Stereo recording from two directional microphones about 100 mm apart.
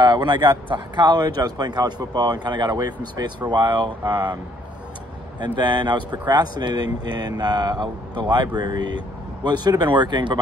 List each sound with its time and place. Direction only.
0.0 s speech: 50° right (ahead or behind)
5.4 s speech: 50° right (ahead or behind)